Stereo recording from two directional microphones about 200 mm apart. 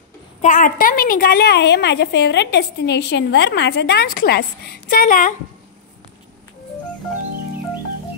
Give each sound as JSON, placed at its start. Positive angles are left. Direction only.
{"t": 0.4, "sound": "a woman's voice", "side_deg": 40}